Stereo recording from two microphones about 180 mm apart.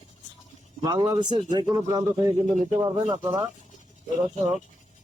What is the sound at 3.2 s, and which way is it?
Speech, 20° right (ahead or behind).